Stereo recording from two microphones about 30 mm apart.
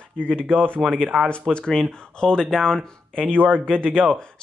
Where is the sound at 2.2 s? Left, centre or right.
Left.